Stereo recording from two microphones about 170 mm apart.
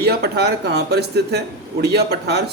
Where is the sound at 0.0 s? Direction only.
70° right (ahead or behind).